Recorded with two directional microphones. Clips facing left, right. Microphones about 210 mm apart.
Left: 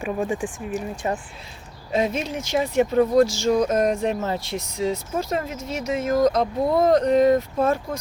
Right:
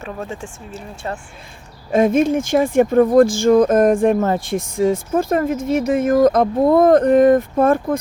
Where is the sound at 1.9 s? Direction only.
50° right (ahead or behind).